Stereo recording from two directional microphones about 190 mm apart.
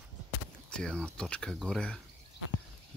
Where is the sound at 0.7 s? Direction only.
5° left (ahead or behind).